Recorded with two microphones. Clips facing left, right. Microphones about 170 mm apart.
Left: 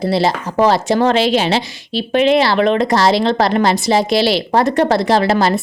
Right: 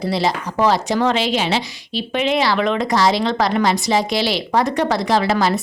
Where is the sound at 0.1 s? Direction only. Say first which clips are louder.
Left 3 dB; 30° left (ahead or behind).